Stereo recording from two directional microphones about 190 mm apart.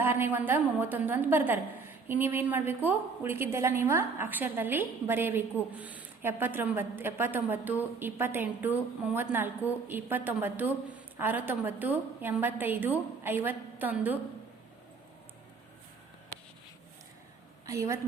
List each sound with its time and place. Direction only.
0.0 s a woman's voice: 10° right (ahead or behind)
17.7 s a woman's voice: 15° right (ahead or behind)